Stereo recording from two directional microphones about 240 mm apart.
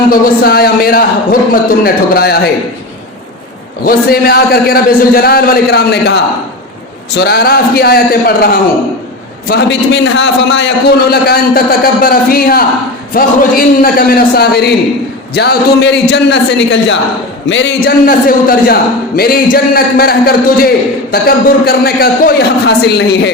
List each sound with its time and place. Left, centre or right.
0.1 s a man's voice: left
3.8 s a man's voice: left
7.2 s a man's voice: left
17.8 s a man's voice: left